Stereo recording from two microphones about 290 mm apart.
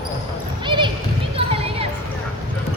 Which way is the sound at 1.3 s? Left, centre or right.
Centre.